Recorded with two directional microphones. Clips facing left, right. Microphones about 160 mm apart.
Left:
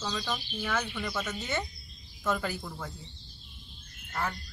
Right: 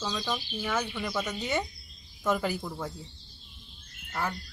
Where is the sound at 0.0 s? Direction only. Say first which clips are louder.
Right 2 dB; 5° right (ahead or behind).